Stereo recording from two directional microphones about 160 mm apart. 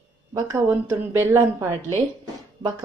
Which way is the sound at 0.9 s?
15° right (ahead or behind).